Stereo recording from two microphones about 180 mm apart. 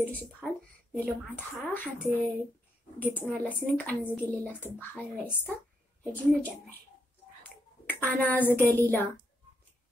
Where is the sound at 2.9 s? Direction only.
10° left (ahead or behind).